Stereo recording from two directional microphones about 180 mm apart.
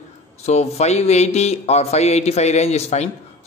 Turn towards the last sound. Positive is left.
turn(degrees=40)  # may be behind; listen again after turning